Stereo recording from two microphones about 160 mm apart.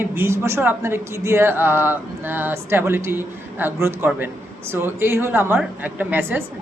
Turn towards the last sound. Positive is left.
turn(degrees=-10)  # may be behind; listen again after turning